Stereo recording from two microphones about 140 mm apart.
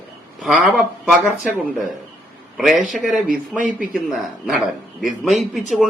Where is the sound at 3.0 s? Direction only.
10° right (ahead or behind).